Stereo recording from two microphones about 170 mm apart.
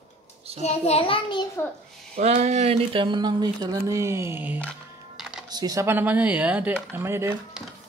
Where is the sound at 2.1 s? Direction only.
40° right (ahead or behind); by 7.3 s 15° right (ahead or behind).